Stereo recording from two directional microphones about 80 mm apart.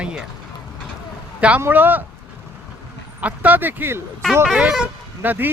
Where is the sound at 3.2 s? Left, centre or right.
Centre.